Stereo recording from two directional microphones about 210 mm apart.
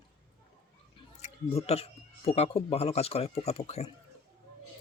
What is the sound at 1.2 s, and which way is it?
Speech, 30° left (ahead or behind).